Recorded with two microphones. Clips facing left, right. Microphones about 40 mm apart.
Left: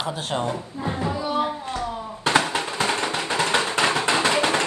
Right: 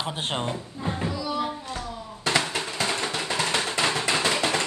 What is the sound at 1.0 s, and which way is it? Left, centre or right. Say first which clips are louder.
Music: left 5 dB; left.